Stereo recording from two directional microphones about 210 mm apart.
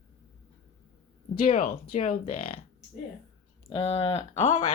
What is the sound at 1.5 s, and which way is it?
Speech, 35° left (ahead or behind).